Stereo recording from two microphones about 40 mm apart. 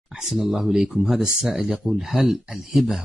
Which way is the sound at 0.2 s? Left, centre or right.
Centre.